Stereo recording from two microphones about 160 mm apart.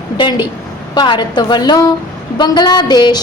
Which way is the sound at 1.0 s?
30° left (ahead or behind).